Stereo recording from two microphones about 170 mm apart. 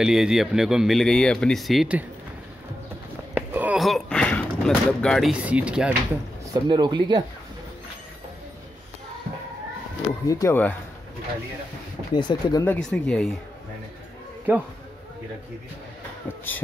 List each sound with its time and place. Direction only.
0.0 s speech: 5° right (ahead or behind)
3.3 s a sound: 10° right (ahead or behind)
6.5 s speech: 25° right (ahead or behind)
10.2 s speech: 15° left (ahead or behind)
12.1 s speech: 25° left (ahead or behind)
12.6 s speech: 5° left (ahead or behind)
14.5 s speech: 10° right (ahead or behind)